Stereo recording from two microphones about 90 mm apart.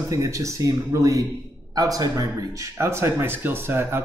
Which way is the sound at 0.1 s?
35° right (ahead or behind).